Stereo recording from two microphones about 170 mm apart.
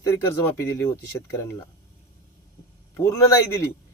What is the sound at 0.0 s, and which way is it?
Speech, 20° left (ahead or behind).